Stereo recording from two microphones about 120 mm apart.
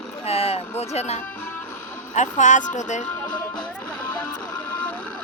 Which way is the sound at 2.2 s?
90° left.